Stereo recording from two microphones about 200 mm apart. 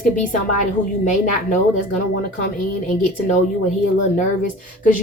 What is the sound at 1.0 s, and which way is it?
Speech, 40° left (ahead or behind).